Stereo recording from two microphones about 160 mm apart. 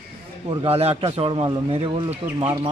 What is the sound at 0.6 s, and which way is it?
A man's voice, 40° right (ahead or behind).